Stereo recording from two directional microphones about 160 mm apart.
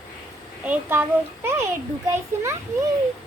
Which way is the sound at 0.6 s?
10° right (ahead or behind).